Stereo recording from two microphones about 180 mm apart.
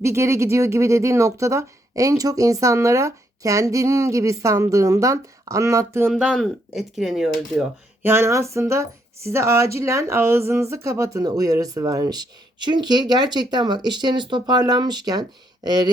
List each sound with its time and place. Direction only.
0.0 s speech: 15° right (ahead or behind)
6.1 s speech: centre (ahead or behind)
8.0 s speech: 15° right (ahead or behind)